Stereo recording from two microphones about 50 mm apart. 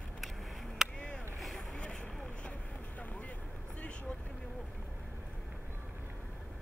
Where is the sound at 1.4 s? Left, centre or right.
Centre.